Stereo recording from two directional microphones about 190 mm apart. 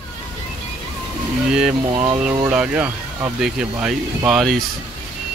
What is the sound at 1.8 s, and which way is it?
Speech, 25° right (ahead or behind).